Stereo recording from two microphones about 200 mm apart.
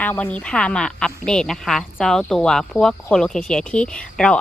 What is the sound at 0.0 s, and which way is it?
A woman's voice, 10° left (ahead or behind).